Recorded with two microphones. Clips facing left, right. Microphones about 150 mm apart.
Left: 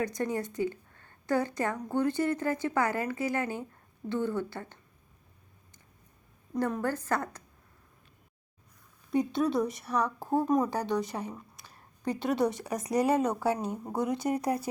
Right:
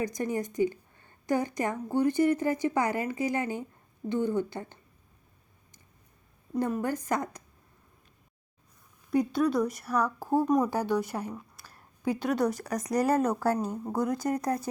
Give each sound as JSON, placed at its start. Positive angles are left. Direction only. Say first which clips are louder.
{"t": 0.0, "sound": "a woman's voice", "louder": "right 1 dB", "side_deg": -10}
{"t": 6.6, "sound": "a woman's voice", "louder": "right 1 dB", "side_deg": -10}
{"t": 9.1, "sound": "speech", "louder": "right 2 dB", "side_deg": 0}
{"t": 12.8, "sound": "speech", "louder": "even", "side_deg": 25}
{"t": 13.1, "sound": "speech", "louder": "right 2 dB", "side_deg": 0}